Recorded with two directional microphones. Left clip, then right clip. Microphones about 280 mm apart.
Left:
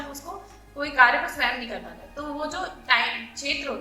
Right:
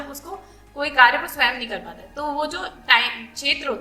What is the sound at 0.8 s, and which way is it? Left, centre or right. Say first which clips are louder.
A woman's voice: right 3 dB; right.